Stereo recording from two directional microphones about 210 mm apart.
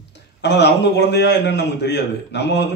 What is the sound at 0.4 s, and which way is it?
A man's voice, 55° left (ahead or behind).